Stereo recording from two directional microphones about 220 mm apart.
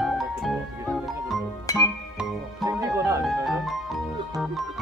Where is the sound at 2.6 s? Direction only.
15° right (ahead or behind).